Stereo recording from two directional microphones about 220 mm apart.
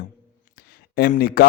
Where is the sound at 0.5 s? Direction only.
45° left (ahead or behind).